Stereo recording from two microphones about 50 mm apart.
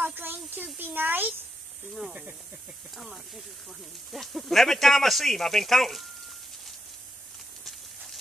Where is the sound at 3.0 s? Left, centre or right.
Centre.